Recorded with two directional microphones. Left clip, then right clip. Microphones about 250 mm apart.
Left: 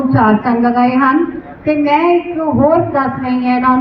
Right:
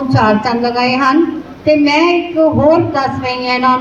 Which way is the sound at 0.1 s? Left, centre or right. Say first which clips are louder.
Right 1 dB; right.